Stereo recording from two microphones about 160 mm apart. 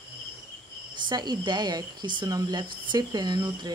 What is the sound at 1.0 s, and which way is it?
Speech, 25° right (ahead or behind).